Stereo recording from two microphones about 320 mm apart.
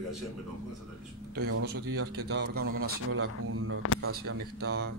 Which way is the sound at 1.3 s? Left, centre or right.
Right.